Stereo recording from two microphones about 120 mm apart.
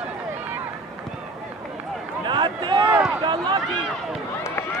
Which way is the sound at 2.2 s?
40° right (ahead or behind).